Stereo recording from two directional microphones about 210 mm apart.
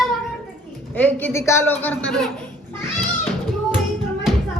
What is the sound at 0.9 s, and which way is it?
A man's voice, 10° left (ahead or behind).